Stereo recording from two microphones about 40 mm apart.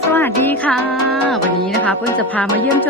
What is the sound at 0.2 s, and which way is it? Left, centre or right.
Music, left.